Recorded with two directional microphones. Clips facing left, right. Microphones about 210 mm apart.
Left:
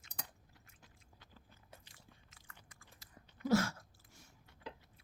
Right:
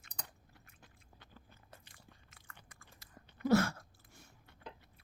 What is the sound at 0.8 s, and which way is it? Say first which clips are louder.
Chewing: right 1 dB; 60° right (ahead or behind).